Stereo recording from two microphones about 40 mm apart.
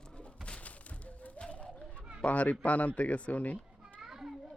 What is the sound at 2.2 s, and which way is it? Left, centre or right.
A child's voice, left.